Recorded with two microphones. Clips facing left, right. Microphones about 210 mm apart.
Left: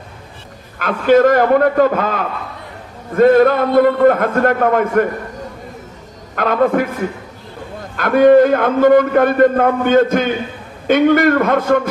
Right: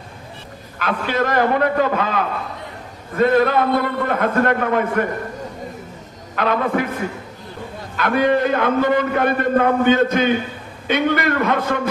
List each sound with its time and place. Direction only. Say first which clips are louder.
0.7 s a man's voice: left 9 dB; 50° left (ahead or behind)
6.3 s a man's voice: left 5 dB; 50° left (ahead or behind)
8.0 s a man's voice: left 8 dB; 50° left (ahead or behind)